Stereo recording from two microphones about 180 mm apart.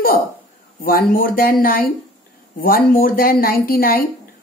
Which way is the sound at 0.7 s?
50° left (ahead or behind).